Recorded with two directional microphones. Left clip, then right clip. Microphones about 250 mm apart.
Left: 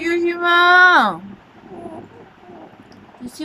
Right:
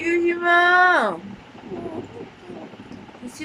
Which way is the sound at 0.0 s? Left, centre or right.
Left.